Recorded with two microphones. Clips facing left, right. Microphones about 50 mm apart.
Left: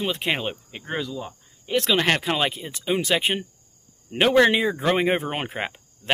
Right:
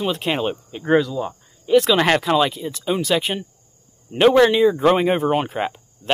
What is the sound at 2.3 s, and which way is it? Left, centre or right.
Speech, centre.